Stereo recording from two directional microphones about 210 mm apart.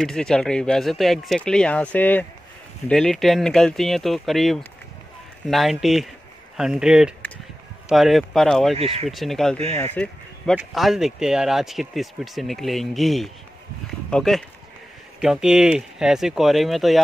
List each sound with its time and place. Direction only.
0.0 s speech: 5° left (ahead or behind)
8.7 s speech: 30° right (ahead or behind)
9.0 s speech: centre (ahead or behind)
9.9 s a sound: 5° left (ahead or behind)
10.7 s speech: centre (ahead or behind)